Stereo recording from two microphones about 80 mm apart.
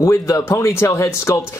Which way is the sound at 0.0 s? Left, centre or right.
Left.